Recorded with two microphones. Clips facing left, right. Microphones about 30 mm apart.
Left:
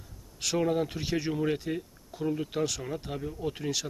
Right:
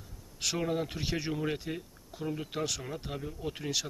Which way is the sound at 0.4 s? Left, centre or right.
Centre.